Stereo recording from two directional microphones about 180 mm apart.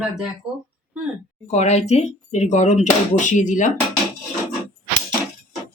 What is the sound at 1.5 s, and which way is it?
Speech, 40° left (ahead or behind).